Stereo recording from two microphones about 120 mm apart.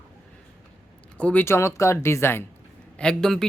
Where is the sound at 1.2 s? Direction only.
15° left (ahead or behind).